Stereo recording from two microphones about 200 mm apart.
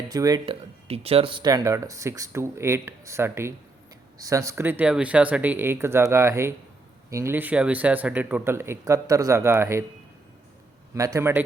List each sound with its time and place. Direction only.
0.1 s speech: 20° right (ahead or behind)
10.9 s speech: 15° right (ahead or behind)